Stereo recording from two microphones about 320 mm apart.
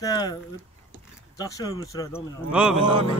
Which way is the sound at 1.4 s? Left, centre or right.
Centre.